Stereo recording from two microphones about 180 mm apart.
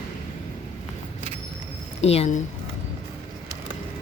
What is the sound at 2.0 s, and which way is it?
Speech, 35° left (ahead or behind).